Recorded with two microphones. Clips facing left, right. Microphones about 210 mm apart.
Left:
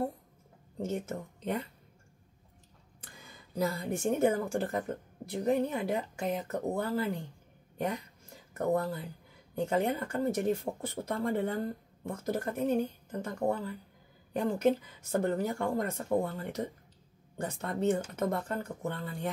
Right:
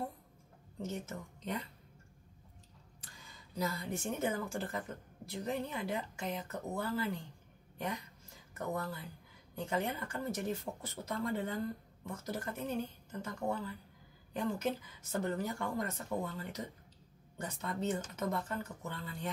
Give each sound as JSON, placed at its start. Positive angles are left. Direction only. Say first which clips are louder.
{"t": 0.7, "sound": "speech", "louder": "left 6 dB", "side_deg": 55}
{"t": 3.0, "sound": "speech", "louder": "left 5 dB", "side_deg": 55}
{"t": 7.7, "sound": "a sound", "louder": "left 6 dB", "side_deg": 50}
{"t": 8.5, "sound": "speech", "louder": "left 9 dB", "side_deg": 55}